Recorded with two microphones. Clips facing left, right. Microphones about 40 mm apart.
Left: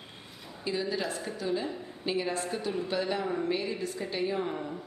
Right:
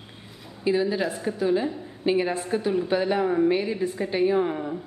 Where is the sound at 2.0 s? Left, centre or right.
Right.